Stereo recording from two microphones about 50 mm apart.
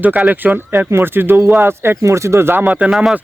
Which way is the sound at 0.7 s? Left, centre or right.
Right.